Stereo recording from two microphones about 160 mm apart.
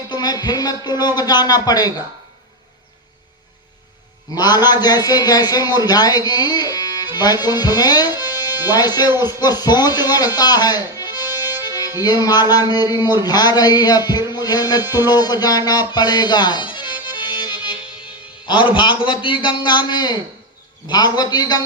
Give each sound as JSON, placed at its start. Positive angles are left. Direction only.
{"t": 0.1, "sound": "a man's voice", "side_deg": 25}
{"t": 4.4, "sound": "a man's voice", "side_deg": 25}
{"t": 17.1, "sound": "accordion", "side_deg": 25}
{"t": 18.4, "sound": "a man's voice", "side_deg": 30}